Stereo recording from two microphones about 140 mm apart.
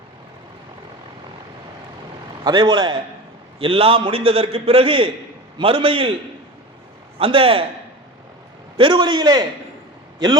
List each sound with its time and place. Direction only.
2.4 s a man's voice: 30° right (ahead or behind)
7.2 s a man's voice: 40° right (ahead or behind)
8.8 s a man's voice: 35° right (ahead or behind)